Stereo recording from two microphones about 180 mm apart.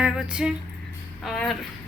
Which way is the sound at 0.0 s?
5° right (ahead or behind).